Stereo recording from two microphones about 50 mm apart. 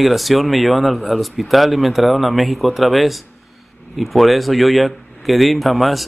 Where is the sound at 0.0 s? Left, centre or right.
Centre.